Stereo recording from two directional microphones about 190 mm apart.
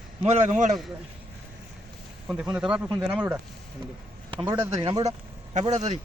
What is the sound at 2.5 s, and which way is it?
Speech, 5° right (ahead or behind).